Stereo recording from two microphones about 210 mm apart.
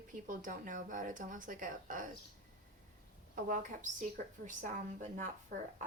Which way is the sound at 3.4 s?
40° right (ahead or behind).